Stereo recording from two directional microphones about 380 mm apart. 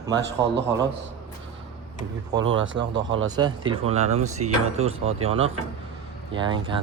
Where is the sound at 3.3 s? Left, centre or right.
Centre.